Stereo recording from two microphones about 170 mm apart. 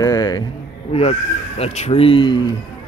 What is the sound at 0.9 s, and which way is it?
Speech, 35° left (ahead or behind).